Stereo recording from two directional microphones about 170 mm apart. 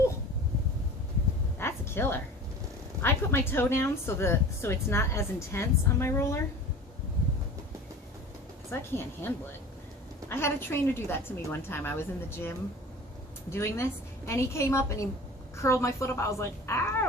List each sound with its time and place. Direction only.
1.5 s a sound: 15° left (ahead or behind)
3.0 s a woman's voice: 15° left (ahead or behind)
8.7 s a woman's voice: 15° left (ahead or behind)